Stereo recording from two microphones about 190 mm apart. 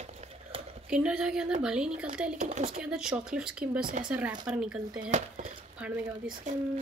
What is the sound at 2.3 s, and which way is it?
Speech, 35° right (ahead or behind).